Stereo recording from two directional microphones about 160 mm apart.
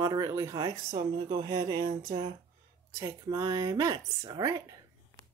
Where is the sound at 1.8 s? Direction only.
65° right (ahead or behind).